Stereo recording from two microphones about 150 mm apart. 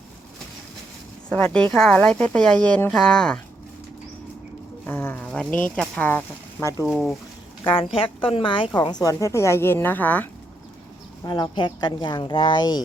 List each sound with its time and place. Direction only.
1.3 s speech: 10° left (ahead or behind)
4.9 s speech: 15° left (ahead or behind)
6.8 s speech: 5° right (ahead or behind)
7.9 s a woman's voice: 35° left (ahead or behind); by 10.2 s 10° left (ahead or behind)
11.2 s a woman's voice: 25° left (ahead or behind)